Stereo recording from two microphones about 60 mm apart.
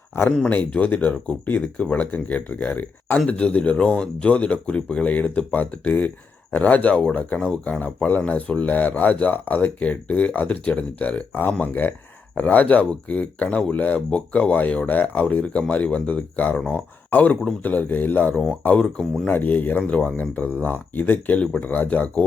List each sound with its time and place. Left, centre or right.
0.4 s speech: left